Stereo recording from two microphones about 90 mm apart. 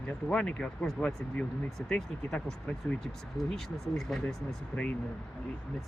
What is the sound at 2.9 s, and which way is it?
Speech, 15° left (ahead or behind).